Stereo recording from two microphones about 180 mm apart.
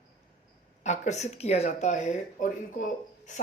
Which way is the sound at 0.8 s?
40° left (ahead or behind).